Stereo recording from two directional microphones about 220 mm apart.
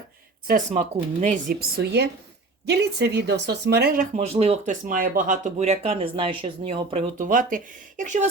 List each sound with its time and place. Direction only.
0.4 s a woman's voice: 35° right (ahead or behind)
4.1 s speech: 30° right (ahead or behind)
7.2 s speech: 35° right (ahead or behind)